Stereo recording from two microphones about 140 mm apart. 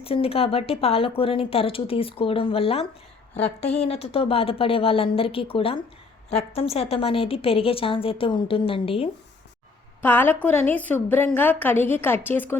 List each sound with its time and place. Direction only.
0.0 s a woman's voice: 40° left (ahead or behind)
10.0 s a woman's voice: 15° left (ahead or behind)